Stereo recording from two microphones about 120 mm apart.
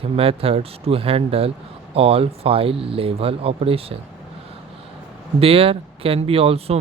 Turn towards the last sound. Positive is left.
turn(degrees=-55)  # may be behind; listen again after turning